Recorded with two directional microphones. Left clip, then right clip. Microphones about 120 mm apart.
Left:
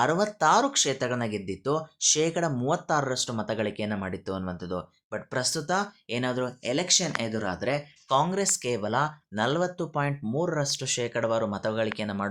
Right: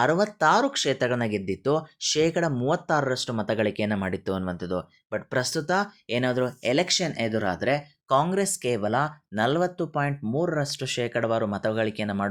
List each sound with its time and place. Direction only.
0.0 s speech: 20° right (ahead or behind)